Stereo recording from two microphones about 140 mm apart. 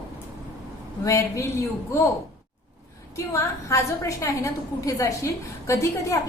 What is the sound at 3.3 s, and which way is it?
A woman's voice, 20° left (ahead or behind).